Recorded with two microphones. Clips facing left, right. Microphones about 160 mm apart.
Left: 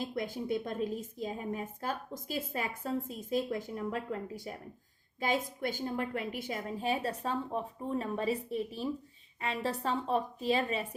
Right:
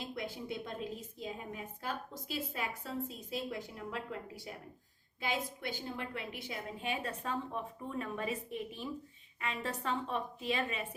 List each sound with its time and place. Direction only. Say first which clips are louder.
0.1 s a woman's voice: left 6 dB; 50° left (ahead or behind)